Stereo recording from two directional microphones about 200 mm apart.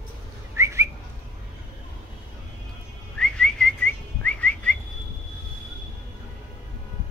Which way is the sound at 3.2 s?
5° left (ahead or behind).